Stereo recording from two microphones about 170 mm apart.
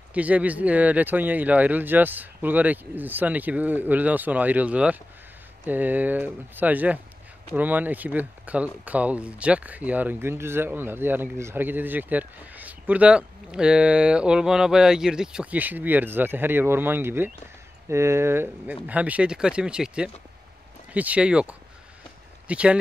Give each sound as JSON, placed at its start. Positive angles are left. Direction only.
{"t": 0.1, "sound": "speech", "side_deg": -10}